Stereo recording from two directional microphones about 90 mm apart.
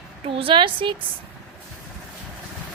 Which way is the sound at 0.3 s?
90° right.